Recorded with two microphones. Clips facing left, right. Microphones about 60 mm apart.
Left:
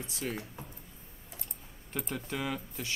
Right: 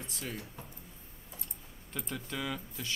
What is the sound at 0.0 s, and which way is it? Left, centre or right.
Speech, centre.